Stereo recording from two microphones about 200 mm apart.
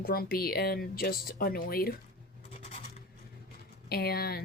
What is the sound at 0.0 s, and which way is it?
Speech, 50° left (ahead or behind).